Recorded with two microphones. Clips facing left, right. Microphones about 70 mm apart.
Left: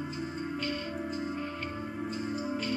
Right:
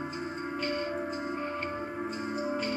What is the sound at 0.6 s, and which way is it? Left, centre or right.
Music, right.